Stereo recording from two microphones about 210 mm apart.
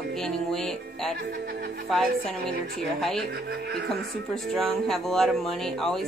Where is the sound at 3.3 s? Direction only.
50° right (ahead or behind).